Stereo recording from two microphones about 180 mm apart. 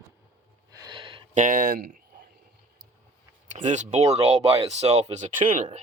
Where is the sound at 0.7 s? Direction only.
25° right (ahead or behind).